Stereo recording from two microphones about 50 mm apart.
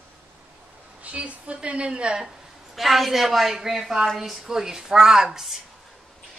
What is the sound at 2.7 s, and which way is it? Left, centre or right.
A woman's voice, centre.